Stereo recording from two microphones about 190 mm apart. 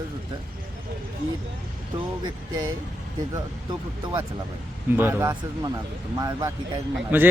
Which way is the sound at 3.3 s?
20° right (ahead or behind).